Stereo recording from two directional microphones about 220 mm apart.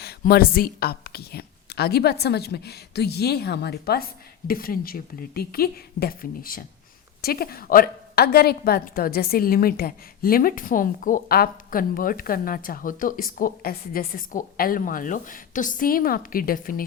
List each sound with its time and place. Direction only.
0.0 s a woman's voice: 45° left (ahead or behind)